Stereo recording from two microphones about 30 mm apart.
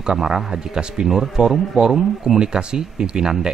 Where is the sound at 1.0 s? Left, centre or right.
Centre.